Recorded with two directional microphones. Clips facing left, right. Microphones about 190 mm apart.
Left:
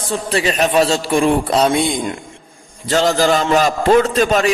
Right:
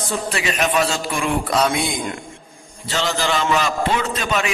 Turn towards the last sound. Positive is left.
turn(degrees=40)  # may be behind; listen again after turning